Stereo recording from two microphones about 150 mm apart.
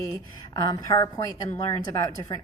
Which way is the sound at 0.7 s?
25° left (ahead or behind).